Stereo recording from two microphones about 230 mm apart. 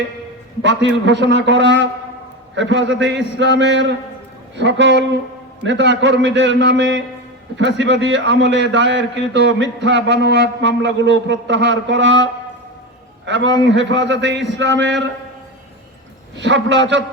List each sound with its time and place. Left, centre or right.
0.6 s a man's voice: right
13.2 s a man's voice: right
16.4 s a man's voice: right